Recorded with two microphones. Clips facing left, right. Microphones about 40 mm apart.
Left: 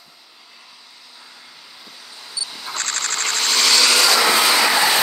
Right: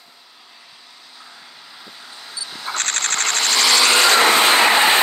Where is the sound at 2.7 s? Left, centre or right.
Right.